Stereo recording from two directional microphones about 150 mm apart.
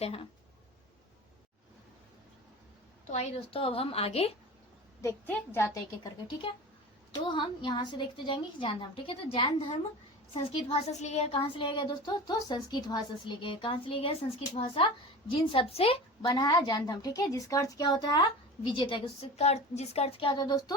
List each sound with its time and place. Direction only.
0.0 s speech: 40° left (ahead or behind)
3.1 s speech: 45° left (ahead or behind)
4.9 s a woman's voice: 20° left (ahead or behind)
7.1 s speech: 30° left (ahead or behind)
16.2 s a woman's voice: 30° left (ahead or behind)